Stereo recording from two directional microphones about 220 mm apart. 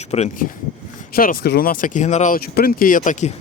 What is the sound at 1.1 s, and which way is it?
Speech, 40° left (ahead or behind).